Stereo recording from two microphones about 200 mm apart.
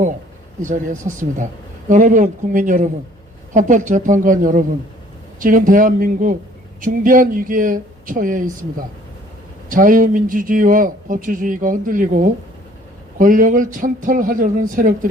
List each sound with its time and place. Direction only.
0.6 s speech: 40° right (ahead or behind)